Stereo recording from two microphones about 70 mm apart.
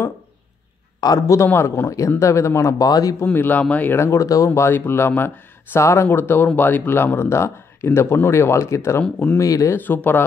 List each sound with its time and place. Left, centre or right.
1.2 s speech: left
1.5 s speech: left
1.9 s speech: left
2.8 s speech: left
3.3 s speech: left
3.9 s speech: left
4.2 s speech: left
4.6 s speech: left
6.0 s speech: left
9.0 s speech: centre
9.4 s speech: left
9.8 s speech: left